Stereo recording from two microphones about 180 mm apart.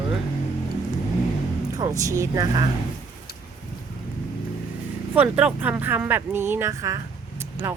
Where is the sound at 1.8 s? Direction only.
20° right (ahead or behind).